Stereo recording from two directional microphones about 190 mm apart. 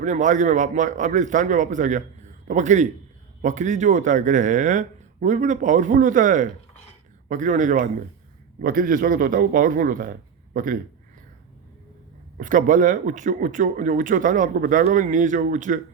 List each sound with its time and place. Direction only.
0.0 s speech: 40° right (ahead or behind)
12.4 s speech: 45° right (ahead or behind)